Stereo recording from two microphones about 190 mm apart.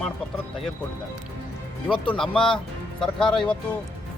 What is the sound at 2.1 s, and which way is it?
Speech, 5° left (ahead or behind).